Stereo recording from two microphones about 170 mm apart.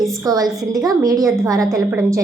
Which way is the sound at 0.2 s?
20° right (ahead or behind).